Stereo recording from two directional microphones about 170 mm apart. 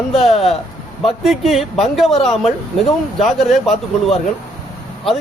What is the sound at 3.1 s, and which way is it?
Speech, centre (ahead or behind).